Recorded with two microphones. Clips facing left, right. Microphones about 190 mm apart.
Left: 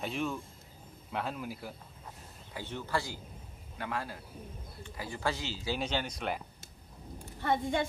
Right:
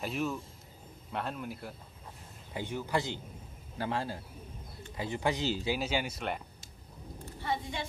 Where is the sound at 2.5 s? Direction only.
20° right (ahead or behind).